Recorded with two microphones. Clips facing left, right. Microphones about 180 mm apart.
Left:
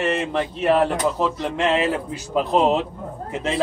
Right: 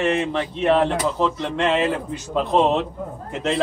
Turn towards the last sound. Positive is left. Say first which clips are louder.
# right 1 dB
turn(degrees=5)  # may be behind; listen again after turning